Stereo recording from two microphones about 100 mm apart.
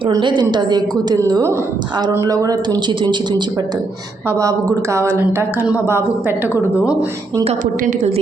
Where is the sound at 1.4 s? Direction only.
25° right (ahead or behind).